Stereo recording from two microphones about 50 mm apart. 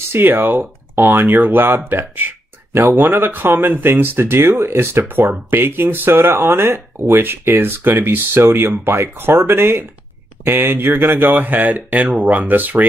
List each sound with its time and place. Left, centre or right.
0.1 s speech: right
1.3 s speech: right
5.0 s speech: right
8.6 s speech: right